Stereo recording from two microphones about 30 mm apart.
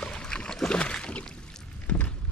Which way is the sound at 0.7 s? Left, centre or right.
Left.